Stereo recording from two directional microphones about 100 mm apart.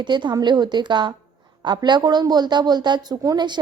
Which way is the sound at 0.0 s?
50° right (ahead or behind).